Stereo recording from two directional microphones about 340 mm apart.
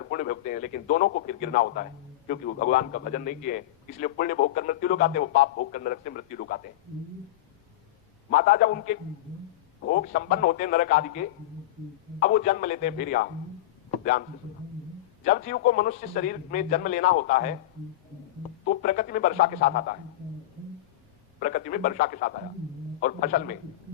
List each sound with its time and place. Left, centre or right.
0.0 s a man's voice: left
8.3 s a man's voice: left
18.6 s a man's voice: left
21.3 s a man's voice: left